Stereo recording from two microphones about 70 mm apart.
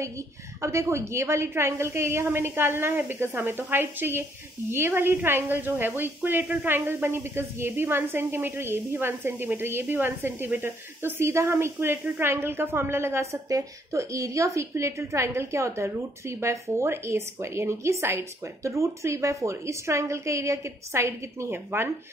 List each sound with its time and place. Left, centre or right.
0.6 s a woman's voice: right